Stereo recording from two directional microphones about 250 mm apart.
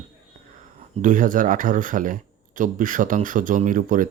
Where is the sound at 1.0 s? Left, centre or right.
Right.